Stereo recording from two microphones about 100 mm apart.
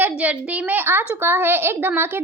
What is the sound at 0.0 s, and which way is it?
A woman's voice, 15° right (ahead or behind).